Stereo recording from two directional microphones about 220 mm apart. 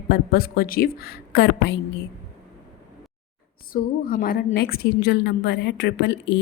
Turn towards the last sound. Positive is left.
turn(degrees=50)  # may be behind; listen again after turning